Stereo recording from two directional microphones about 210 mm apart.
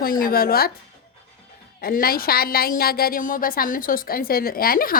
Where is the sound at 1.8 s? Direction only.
45° left (ahead or behind).